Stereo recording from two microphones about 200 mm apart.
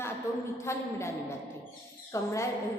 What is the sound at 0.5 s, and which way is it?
A woman's voice, 15° left (ahead or behind).